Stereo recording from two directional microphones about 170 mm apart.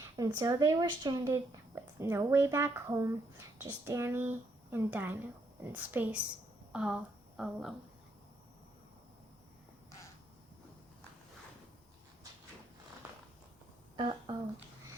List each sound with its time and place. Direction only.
0.2 s speech: 20° right (ahead or behind); by 7.7 s centre (ahead or behind)
13.9 s speech: 30° right (ahead or behind)